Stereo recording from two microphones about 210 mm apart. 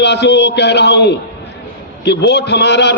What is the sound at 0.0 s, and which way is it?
A man's voice, 55° left (ahead or behind).